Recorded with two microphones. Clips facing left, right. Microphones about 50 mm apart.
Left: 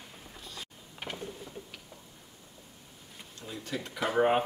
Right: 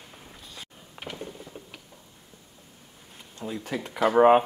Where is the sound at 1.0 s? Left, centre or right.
Right.